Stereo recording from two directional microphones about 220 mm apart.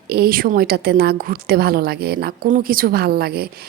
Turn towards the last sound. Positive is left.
turn(degrees=-45)  # may be behind; listen again after turning